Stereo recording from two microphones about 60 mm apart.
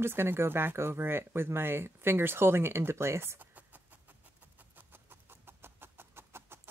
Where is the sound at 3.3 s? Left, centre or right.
Right.